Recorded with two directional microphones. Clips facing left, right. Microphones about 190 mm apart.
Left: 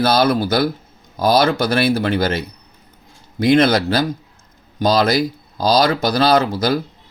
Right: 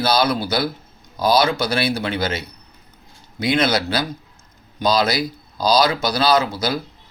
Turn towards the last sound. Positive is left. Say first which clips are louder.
# left 3 dB
turn(degrees=55)  # may be behind; listen again after turning